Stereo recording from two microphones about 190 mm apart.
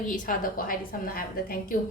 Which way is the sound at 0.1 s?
45° left (ahead or behind).